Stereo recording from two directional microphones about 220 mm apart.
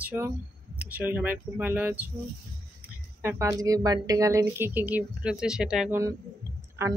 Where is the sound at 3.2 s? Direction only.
10° right (ahead or behind).